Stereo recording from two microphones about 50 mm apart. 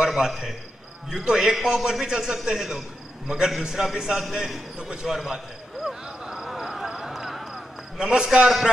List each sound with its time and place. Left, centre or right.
0.0 s a man's voice: centre
5.9 s a sound: centre
8.0 s a man's voice: centre